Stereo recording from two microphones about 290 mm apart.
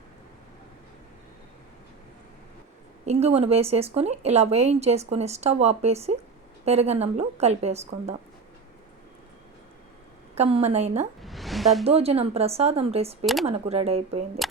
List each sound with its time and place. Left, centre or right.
3.1 s speech: right
10.3 s speech: right
11.2 s music: centre
11.9 s speech: right